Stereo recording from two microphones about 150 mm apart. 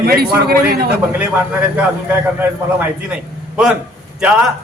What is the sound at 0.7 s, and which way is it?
Speech, 90° right.